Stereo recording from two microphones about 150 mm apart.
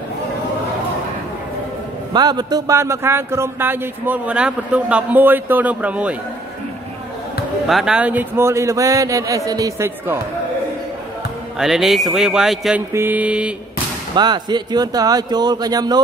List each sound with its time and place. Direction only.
2.1 s a man's voice: 30° right (ahead or behind); by 6.1 s 10° right (ahead or behind)
7.6 s speech: 5° right (ahead or behind)
11.5 s a man's voice: centre (ahead or behind)
12.9 s a man's voice: 10° right (ahead or behind)
14.1 s speech: 30° right (ahead or behind)